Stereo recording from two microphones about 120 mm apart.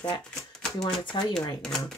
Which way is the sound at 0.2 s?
5° left (ahead or behind).